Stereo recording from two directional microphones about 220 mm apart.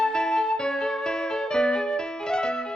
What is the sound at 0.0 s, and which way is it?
Music, 5° left (ahead or behind).